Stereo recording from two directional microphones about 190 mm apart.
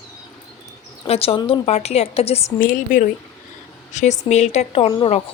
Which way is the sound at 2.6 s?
45° left (ahead or behind).